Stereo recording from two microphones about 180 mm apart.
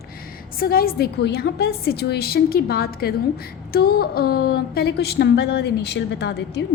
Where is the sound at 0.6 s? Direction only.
55° left (ahead or behind).